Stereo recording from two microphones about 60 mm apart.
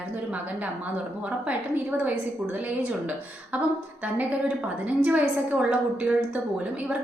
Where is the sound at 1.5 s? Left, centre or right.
Right.